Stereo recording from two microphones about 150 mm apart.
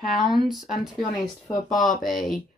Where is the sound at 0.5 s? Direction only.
Centre (ahead or behind).